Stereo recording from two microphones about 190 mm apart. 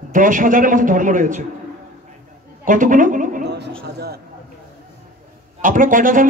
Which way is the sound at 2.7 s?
45° right (ahead or behind).